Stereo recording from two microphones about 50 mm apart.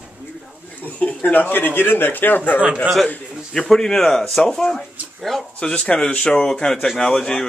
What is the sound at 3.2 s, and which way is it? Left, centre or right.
Speech, centre.